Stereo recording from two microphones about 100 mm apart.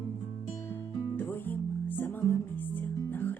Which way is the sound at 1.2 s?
20° left (ahead or behind).